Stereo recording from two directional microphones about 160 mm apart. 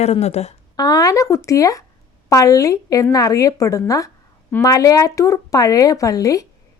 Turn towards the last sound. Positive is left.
turn(degrees=20)  # may be behind; listen again after turning